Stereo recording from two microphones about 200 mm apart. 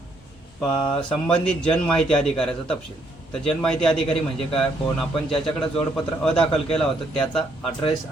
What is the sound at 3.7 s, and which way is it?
A man's voice, 5° left (ahead or behind).